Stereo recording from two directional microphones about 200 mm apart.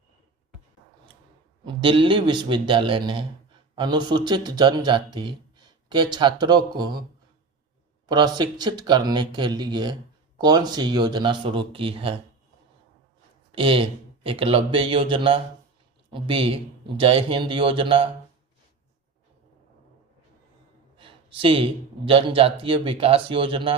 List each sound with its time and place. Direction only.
1.6 s speech: 25° right (ahead or behind)
8.0 s speech: 20° right (ahead or behind)
13.5 s speech: 25° right (ahead or behind)
21.0 s speech: 25° right (ahead or behind)